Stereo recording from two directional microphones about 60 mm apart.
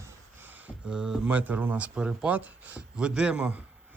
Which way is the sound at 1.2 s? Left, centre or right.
Right.